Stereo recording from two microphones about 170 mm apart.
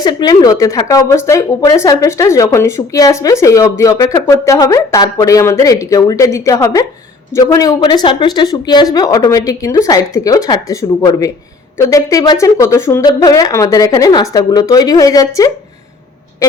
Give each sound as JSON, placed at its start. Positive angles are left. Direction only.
{"t": 0.0, "sound": "speech", "side_deg": 25}